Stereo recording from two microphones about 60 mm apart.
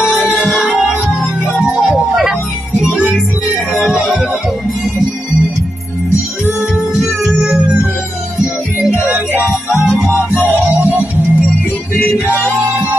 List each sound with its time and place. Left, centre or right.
0.4 s music: centre
1.7 s music: centre
2.0 s music: centre
6.9 s music: centre
7.3 s music: centre
9.0 s music: right
10.8 s music: right